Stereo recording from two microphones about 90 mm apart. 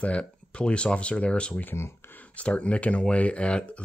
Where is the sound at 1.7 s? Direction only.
25° left (ahead or behind).